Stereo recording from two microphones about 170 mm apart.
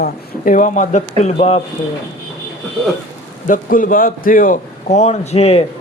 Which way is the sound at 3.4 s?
50° left (ahead or behind).